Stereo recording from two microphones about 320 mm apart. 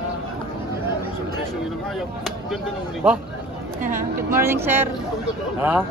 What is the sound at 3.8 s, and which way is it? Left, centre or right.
Speech, right.